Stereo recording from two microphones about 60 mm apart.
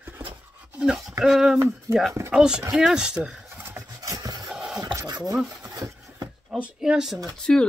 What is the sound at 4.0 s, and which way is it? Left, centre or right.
Rub, right.